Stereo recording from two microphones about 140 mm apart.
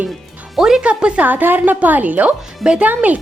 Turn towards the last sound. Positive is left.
turn(degrees=-10)  # may be behind; listen again after turning